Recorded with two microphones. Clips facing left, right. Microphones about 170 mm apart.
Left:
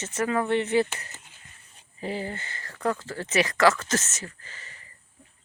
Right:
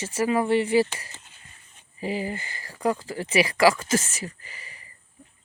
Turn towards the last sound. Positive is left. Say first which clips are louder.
# right 2 dB
turn(degrees=-10)  # may be behind; listen again after turning